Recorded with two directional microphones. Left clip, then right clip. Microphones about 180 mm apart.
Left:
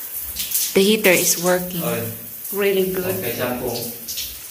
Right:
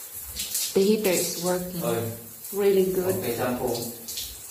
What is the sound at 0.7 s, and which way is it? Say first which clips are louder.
Speech: left 7 dB; 5° left (ahead or behind).